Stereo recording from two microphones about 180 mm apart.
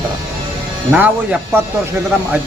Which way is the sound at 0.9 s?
10° right (ahead or behind).